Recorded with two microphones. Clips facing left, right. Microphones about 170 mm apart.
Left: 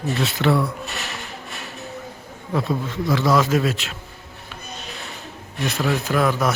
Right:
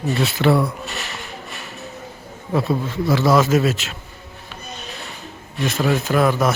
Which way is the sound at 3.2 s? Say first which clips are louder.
Right 3 dB; 25° right (ahead or behind).